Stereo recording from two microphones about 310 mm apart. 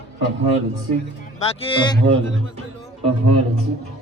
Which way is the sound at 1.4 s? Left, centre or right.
Centre.